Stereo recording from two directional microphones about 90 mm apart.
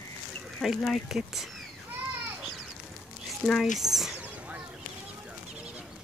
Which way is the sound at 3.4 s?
5° left (ahead or behind).